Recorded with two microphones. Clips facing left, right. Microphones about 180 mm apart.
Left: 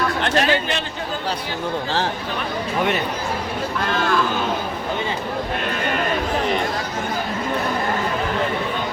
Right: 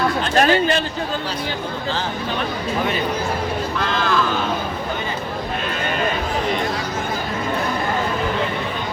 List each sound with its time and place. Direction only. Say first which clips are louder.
0.3 s speech: right 5 dB; 45° right (ahead or behind)